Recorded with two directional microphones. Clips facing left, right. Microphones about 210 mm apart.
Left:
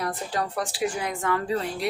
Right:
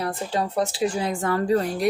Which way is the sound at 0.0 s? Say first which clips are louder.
Right 3 dB; 25° right (ahead or behind).